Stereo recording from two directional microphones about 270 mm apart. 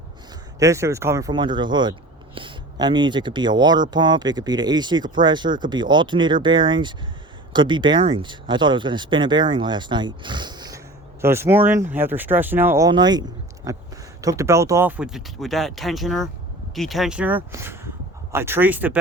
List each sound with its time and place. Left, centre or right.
0.6 s speech: centre